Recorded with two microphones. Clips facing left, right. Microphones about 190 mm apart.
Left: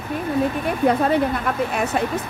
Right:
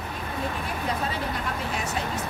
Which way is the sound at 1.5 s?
55° left (ahead or behind).